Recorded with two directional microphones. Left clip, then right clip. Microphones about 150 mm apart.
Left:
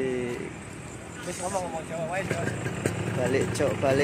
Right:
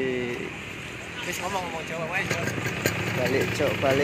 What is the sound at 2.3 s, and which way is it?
Speech, 50° left (ahead or behind).